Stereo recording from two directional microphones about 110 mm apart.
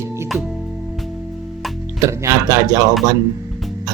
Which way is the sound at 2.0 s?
25° right (ahead or behind).